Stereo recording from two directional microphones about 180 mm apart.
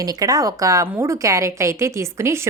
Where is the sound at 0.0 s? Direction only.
20° right (ahead or behind).